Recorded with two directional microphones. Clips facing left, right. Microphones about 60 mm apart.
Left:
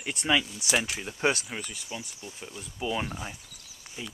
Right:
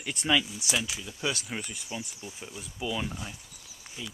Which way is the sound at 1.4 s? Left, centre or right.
Centre.